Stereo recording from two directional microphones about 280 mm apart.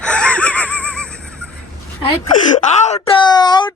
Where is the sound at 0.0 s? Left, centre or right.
Centre.